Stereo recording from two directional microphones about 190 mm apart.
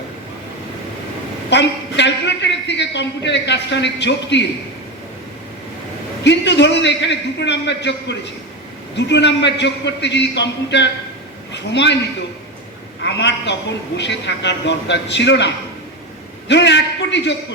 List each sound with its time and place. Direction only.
1.5 s a man's voice: 65° left (ahead or behind)
6.2 s a man's voice: 65° left (ahead or behind)
13.0 s a man's voice: 65° left (ahead or behind)